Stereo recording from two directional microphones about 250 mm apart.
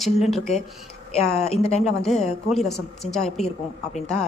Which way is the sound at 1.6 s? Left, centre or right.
Left.